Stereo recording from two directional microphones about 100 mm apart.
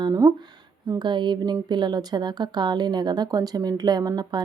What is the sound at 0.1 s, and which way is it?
Speech, 30° right (ahead or behind).